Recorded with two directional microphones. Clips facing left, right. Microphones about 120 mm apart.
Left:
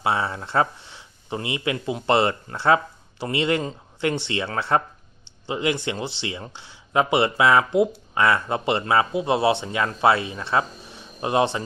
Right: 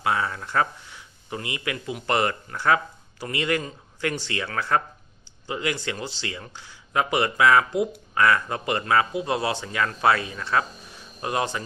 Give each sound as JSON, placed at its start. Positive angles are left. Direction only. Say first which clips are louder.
{"t": 0.0, "sound": "speech", "louder": "left 1 dB", "side_deg": 25}